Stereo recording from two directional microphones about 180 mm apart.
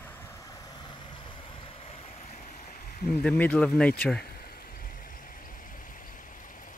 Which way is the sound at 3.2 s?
5° left (ahead or behind).